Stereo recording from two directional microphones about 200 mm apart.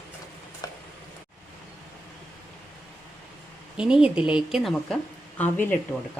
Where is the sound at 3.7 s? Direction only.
5° right (ahead or behind).